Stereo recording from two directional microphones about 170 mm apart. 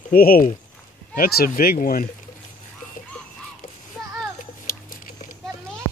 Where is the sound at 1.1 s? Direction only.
60° left (ahead or behind).